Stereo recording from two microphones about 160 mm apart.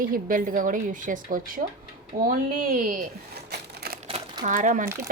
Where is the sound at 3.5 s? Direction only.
80° right.